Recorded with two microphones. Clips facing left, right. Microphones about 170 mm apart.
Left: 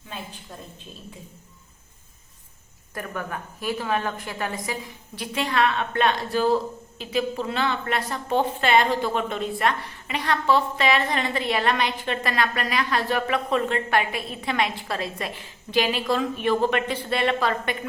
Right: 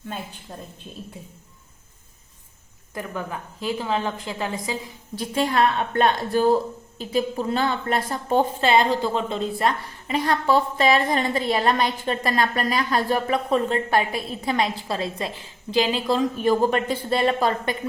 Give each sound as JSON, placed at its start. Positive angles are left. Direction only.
{"t": 3.2, "sound": "a woman's voice", "side_deg": -20}
{"t": 5.1, "sound": "a woman's voice", "side_deg": -40}
{"t": 8.6, "sound": "a woman's voice", "side_deg": -30}